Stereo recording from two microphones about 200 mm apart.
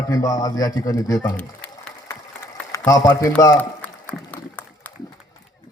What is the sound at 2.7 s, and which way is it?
Speech, 20° left (ahead or behind).